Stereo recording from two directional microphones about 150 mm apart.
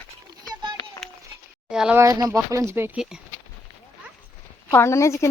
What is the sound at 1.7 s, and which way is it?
Speech, 5° right (ahead or behind).